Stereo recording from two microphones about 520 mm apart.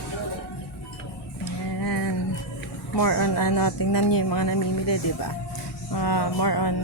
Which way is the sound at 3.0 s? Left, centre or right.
Left.